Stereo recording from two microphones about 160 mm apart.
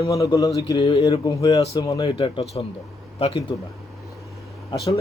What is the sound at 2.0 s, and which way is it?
Speech, 35° left (ahead or behind).